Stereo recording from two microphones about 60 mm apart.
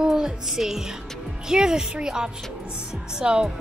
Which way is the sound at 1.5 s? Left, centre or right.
Centre.